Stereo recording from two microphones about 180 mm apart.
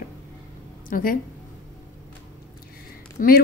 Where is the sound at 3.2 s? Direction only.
50° left (ahead or behind).